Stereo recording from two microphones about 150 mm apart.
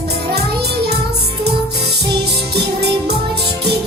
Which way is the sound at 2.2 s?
90° right.